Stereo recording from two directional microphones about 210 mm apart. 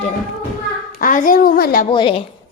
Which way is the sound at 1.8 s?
25° left (ahead or behind).